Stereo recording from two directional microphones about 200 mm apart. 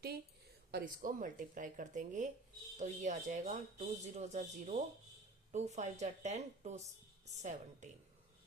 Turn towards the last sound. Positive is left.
turn(degrees=-35)  # may be behind; listen again after turning